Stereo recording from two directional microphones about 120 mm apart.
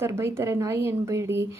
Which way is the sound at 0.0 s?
20° right (ahead or behind).